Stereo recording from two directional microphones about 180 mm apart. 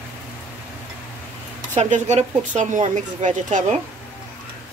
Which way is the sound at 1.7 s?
40° right (ahead or behind).